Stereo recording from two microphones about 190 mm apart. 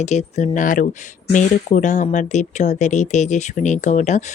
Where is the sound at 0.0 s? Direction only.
35° left (ahead or behind).